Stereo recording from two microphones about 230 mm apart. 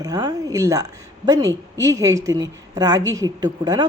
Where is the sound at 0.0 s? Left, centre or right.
Centre.